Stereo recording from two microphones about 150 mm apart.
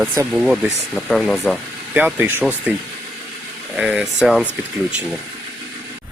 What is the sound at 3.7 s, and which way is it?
Speech, 5° right (ahead or behind).